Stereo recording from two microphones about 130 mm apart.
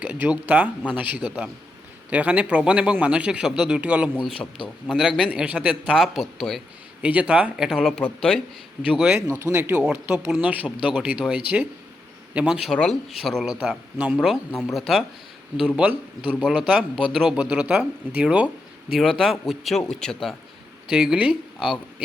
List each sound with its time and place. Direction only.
0.0 s a man's voice: 10° right (ahead or behind)
4.4 s speech: 40° left (ahead or behind)
4.9 s a man's voice: 5° right (ahead or behind)
8.8 s a man's voice: 5° right (ahead or behind)
16.3 s a man's voice: 5° left (ahead or behind)
16.6 s a man's voice: 5° right (ahead or behind)